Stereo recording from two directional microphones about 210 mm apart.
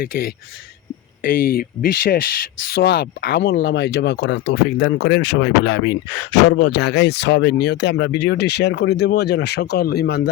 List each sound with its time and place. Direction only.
0.0 s speech: 45° left (ahead or behind)